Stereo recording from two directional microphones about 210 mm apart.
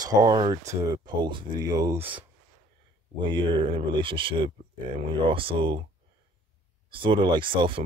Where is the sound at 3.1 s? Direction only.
20° right (ahead or behind).